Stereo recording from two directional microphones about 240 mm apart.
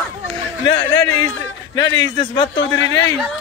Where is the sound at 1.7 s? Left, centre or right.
Centre.